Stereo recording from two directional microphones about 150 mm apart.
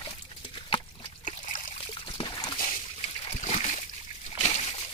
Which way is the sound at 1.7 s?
35° left (ahead or behind).